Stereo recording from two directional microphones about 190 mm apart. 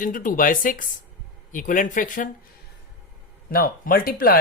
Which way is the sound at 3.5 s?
50° left (ahead or behind).